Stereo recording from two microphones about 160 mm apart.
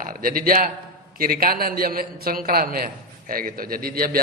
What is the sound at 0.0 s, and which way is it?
A man's voice, 60° right (ahead or behind).